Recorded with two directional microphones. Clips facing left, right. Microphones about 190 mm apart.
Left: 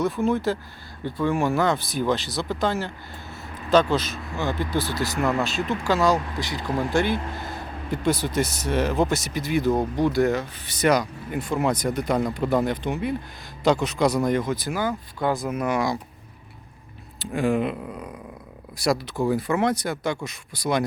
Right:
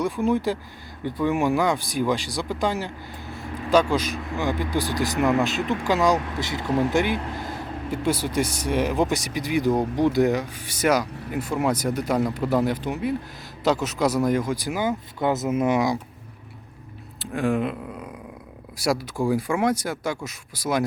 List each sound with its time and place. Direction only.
0.0 s speech: 10° right (ahead or behind)
17.2 s speech: centre (ahead or behind)